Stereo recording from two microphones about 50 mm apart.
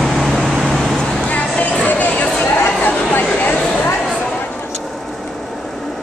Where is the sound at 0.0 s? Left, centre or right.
Centre.